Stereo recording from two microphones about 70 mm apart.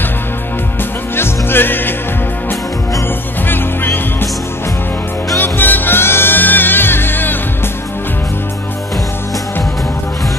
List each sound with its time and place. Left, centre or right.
1.1 s music: left
3.4 s music: left
5.4 s music: left